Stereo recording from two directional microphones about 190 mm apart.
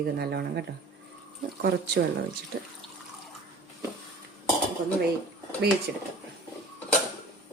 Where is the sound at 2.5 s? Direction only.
65° right (ahead or behind).